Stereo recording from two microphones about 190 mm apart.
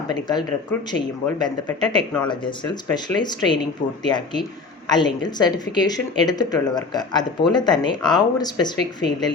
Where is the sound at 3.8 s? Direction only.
40° left (ahead or behind).